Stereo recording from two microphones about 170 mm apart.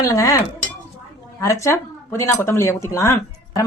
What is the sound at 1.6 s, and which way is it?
Speech, 15° left (ahead or behind).